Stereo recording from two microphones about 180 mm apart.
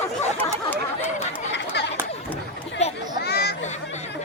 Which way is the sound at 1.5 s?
70° left (ahead or behind).